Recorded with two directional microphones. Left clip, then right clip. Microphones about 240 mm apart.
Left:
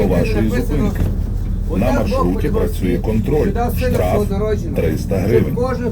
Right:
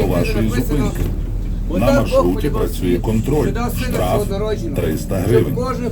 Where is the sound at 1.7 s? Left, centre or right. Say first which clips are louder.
Right 3 dB; right.